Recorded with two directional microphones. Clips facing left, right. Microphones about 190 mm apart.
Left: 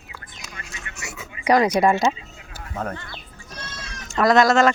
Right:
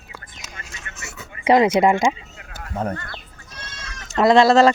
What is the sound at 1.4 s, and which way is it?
Speech, 25° right (ahead or behind).